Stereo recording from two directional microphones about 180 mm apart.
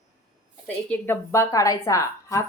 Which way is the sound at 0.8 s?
10° left (ahead or behind).